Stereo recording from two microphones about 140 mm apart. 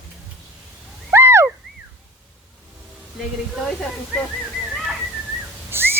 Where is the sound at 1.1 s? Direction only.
15° right (ahead or behind).